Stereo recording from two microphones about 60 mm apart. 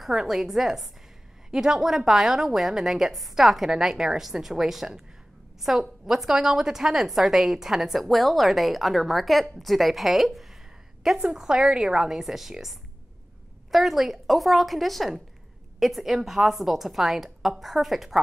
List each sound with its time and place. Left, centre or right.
0.0 s a woman's voice: centre